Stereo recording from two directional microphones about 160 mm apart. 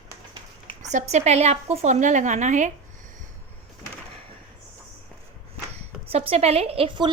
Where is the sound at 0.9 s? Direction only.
45° right (ahead or behind).